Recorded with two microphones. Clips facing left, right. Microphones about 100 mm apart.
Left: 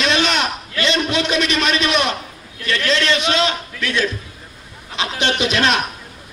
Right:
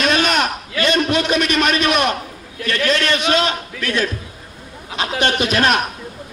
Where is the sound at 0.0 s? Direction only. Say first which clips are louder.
Right 1 dB; 50° right (ahead or behind).